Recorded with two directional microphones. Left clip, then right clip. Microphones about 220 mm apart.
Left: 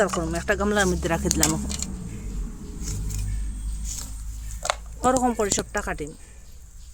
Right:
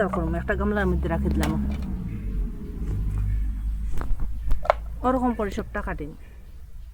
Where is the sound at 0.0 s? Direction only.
45° left (ahead or behind).